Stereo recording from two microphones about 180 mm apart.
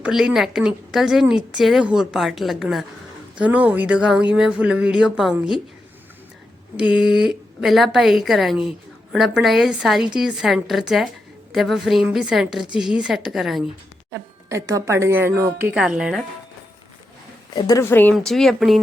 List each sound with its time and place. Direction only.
0.0 s a woman's voice: 5° right (ahead or behind)
6.8 s a woman's voice: 5° right (ahead or behind)
14.1 s speech: 15° right (ahead or behind)
17.5 s speech: 20° left (ahead or behind); by 18.8 s centre (ahead or behind)